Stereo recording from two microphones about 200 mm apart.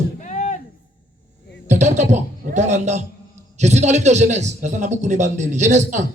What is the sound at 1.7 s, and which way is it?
Speech, 35° right (ahead or behind).